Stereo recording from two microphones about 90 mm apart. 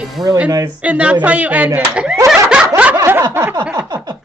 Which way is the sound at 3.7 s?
45° right (ahead or behind).